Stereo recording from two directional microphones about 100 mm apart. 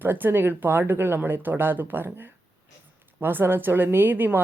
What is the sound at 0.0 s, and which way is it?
Speech, 20° right (ahead or behind).